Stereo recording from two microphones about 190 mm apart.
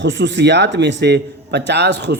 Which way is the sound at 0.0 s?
70° right (ahead or behind).